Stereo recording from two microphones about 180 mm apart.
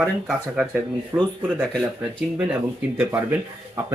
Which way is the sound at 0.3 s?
Centre (ahead or behind).